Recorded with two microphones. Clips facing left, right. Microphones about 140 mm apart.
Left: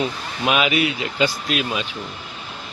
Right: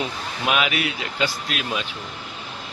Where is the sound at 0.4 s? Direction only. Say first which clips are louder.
Left 4 dB; centre (ahead or behind).